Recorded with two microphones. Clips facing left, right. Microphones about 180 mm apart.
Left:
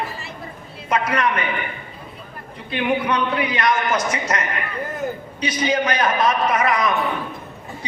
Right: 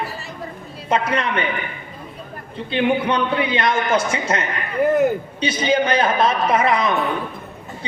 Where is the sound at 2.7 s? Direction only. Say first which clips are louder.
Right 2 dB; 30° right (ahead or behind).